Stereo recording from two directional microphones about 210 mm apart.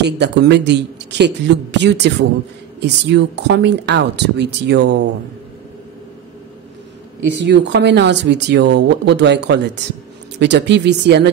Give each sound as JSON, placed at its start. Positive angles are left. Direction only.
{"t": 0.0, "sound": "speech", "side_deg": -55}
{"t": 7.3, "sound": "speech", "side_deg": -55}